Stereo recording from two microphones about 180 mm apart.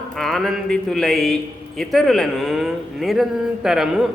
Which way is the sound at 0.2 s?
Centre (ahead or behind).